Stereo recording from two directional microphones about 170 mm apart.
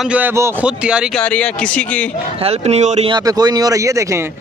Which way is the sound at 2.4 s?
40° right (ahead or behind).